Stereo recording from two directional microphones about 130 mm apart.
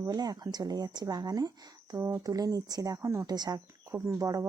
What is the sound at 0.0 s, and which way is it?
Speech, 30° right (ahead or behind).